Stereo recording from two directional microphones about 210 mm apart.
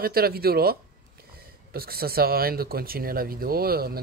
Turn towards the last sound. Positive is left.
turn(degrees=-45)  # may be behind; listen again after turning